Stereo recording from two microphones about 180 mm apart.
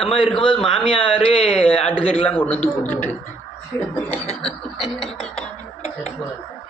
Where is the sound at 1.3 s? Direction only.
30° left (ahead or behind).